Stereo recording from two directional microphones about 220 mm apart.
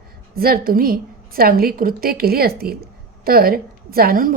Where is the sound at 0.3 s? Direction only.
45° right (ahead or behind).